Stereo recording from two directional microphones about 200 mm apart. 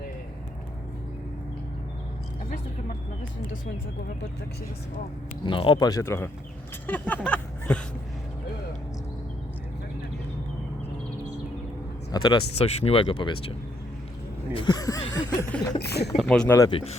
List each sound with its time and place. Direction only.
5.5 s speech: 25° left (ahead or behind)
6.8 s chuckle: 10° left (ahead or behind)
7.3 s a sound: 5° left (ahead or behind)
12.1 s speech: 20° left (ahead or behind)
14.5 s chuckle: 20° left (ahead or behind)
15.8 s speech: 55° left (ahead or behind)
16.1 s speech: centre (ahead or behind)
16.6 s speech: 25° left (ahead or behind)